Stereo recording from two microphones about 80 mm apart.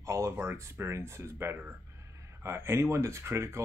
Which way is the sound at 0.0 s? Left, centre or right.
Right.